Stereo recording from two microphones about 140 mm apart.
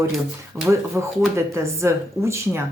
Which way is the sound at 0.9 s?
20° right (ahead or behind).